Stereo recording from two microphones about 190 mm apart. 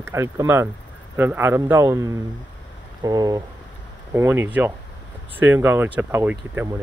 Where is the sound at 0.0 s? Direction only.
15° right (ahead or behind).